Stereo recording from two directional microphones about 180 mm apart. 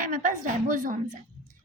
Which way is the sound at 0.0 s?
50° right (ahead or behind).